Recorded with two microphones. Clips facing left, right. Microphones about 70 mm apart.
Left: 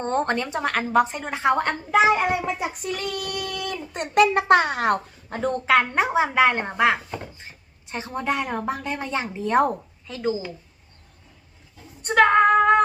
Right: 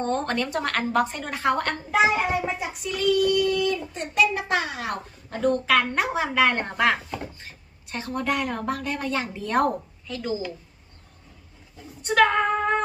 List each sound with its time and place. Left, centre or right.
0.0 s a woman's voice: left
0.4 s a woman's voice: centre
1.9 s speech: centre
2.6 s speech: left
5.3 s a woman's voice: left
12.3 s female singing: left